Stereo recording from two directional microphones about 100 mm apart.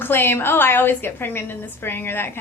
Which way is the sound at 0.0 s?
20° left (ahead or behind).